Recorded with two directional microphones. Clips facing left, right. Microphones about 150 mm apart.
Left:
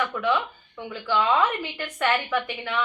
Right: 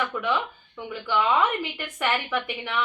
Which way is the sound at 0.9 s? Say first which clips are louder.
Left 1 dB; 10° right (ahead or behind).